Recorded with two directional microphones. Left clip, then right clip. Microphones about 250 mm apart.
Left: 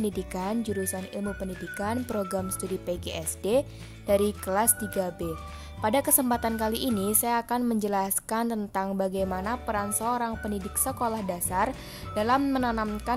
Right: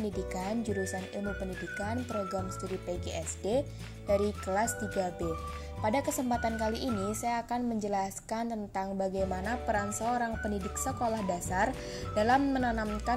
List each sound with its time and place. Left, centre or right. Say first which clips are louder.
0.3 s a woman's voice: left 3 dB; centre